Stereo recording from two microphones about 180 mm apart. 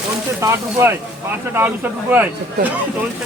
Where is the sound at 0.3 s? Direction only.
15° right (ahead or behind).